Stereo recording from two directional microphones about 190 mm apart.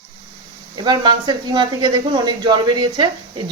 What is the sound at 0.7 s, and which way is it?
Speech, 25° right (ahead or behind).